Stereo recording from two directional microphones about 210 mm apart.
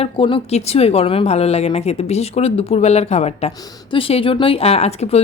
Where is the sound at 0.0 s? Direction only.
25° left (ahead or behind).